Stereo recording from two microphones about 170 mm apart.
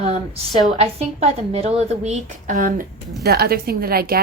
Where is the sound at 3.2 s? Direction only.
65° right (ahead or behind).